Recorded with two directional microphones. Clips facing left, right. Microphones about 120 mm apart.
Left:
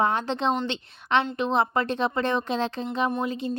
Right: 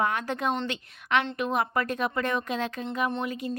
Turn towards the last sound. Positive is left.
turn(degrees=30)  # may be behind; listen again after turning